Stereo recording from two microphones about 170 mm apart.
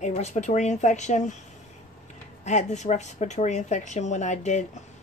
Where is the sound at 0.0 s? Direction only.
40° left (ahead or behind).